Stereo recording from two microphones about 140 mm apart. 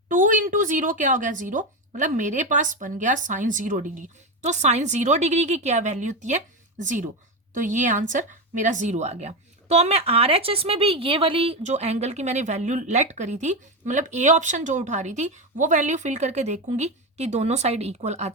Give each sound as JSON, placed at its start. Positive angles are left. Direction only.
{"t": 0.1, "sound": "speech", "side_deg": -70}